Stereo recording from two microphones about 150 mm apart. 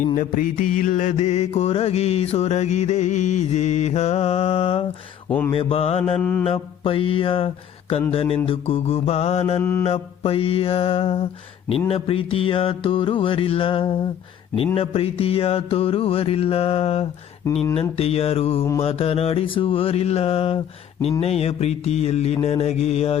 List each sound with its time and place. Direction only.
0.2 s mantra: 65° left (ahead or behind); by 6.1 s 40° left (ahead or behind)
6.1 s mantra: 10° left (ahead or behind)
6.4 s mantra: 40° left (ahead or behind)
9.6 s mantra: 15° left (ahead or behind)
9.8 s mantra: 40° left (ahead or behind)